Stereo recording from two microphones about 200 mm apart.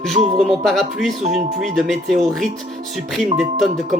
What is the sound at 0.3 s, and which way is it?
Speech, centre (ahead or behind).